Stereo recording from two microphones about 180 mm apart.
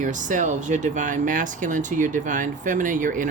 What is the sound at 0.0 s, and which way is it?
Speech, 45° right (ahead or behind).